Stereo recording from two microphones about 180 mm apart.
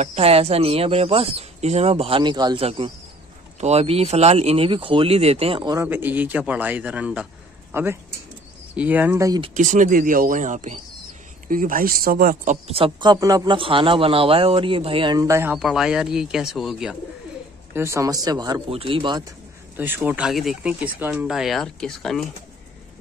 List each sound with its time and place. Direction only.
0.0 s speech: 35° right (ahead or behind)
5.9 s speech: 10° right (ahead or behind)
9.4 s speech: 45° right (ahead or behind)
12.6 s a man's voice: 30° right (ahead or behind); by 15.5 s 15° right (ahead or behind)
15.5 s speech: 5° right (ahead or behind)
17.7 s a man's voice: 15° right (ahead or behind)
19.8 s speech: 10° right (ahead or behind)